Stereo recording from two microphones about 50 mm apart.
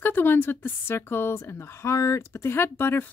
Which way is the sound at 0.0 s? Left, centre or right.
Left.